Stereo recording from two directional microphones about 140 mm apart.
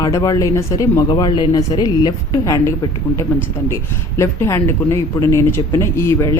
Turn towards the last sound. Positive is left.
turn(degrees=20)  # may be behind; listen again after turning